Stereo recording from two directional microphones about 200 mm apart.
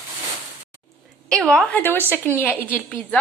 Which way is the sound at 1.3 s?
5° left (ahead or behind).